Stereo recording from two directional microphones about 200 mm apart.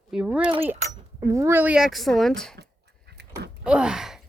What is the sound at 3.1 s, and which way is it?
Livestock, 55° right (ahead or behind).